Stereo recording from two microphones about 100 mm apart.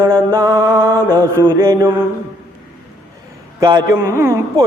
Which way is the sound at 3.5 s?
40° right (ahead or behind).